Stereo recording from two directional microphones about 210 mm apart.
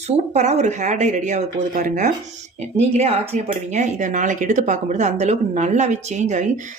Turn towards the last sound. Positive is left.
turn(degrees=-35)  # may be behind; listen again after turning